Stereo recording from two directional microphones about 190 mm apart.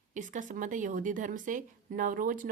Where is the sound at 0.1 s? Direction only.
40° right (ahead or behind).